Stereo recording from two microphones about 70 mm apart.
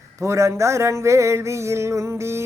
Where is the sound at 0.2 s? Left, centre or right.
Right.